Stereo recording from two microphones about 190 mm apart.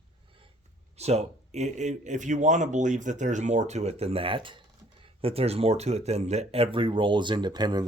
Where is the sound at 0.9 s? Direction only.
35° right (ahead or behind).